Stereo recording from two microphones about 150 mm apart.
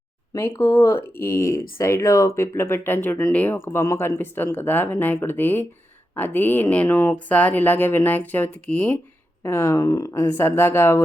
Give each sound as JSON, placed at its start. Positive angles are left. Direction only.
{"t": 0.3, "sound": "speech", "side_deg": 20}